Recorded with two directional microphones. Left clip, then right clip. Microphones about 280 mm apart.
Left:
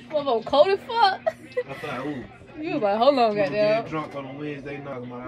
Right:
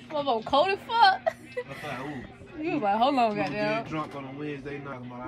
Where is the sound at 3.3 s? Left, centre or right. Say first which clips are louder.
Left 7 dB; centre.